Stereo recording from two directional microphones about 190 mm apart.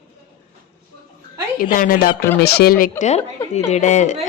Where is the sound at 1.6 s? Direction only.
45° left (ahead or behind).